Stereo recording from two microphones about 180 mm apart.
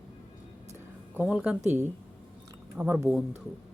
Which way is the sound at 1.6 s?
40° right (ahead or behind).